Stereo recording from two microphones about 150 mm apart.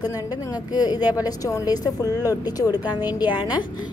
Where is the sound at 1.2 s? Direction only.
25° left (ahead or behind).